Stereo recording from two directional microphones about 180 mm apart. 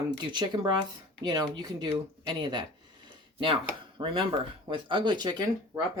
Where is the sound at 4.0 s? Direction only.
30° right (ahead or behind).